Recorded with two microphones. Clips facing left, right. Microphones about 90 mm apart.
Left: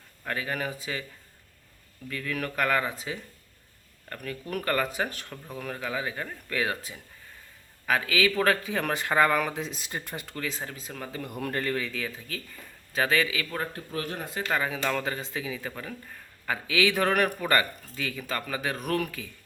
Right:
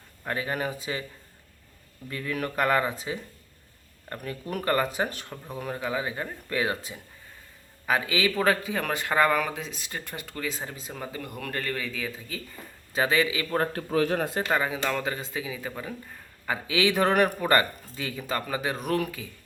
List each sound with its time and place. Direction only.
0.3 s speech: 25° right (ahead or behind)
2.0 s speech: 20° right (ahead or behind); by 10.5 s centre (ahead or behind)
10.5 s a man's voice: 15° right (ahead or behind)
11.3 s speech: 5° left (ahead or behind)
12.5 s a man's voice: 20° right (ahead or behind)
13.7 s a man's voice: 90° right
14.4 s a man's voice: 15° right (ahead or behind)
14.8 s a man's voice: 5° right (ahead or behind)
16.6 s speech: 20° right (ahead or behind)